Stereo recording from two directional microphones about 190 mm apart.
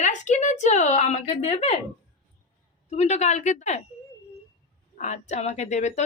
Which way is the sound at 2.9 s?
35° left (ahead or behind).